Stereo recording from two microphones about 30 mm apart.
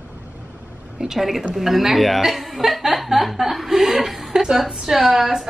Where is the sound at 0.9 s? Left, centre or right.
Centre.